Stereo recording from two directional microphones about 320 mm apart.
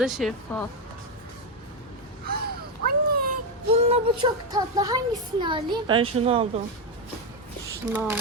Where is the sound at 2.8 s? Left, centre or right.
Right.